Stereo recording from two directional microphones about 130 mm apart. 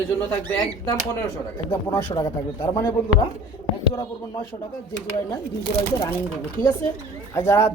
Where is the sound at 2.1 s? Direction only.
30° left (ahead or behind).